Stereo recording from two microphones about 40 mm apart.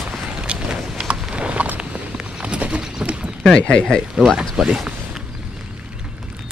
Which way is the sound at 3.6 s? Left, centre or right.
Left.